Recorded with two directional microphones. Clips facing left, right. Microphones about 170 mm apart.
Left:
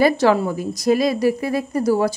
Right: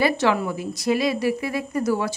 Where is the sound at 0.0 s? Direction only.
40° left (ahead or behind).